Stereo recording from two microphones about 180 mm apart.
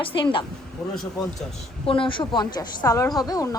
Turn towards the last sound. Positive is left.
turn(degrees=20)  # may be behind; listen again after turning